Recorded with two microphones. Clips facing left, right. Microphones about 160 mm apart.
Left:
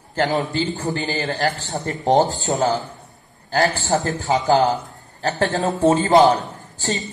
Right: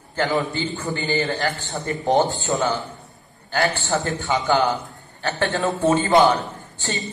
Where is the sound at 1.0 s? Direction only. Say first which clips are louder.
Right 2 dB; 40° left (ahead or behind).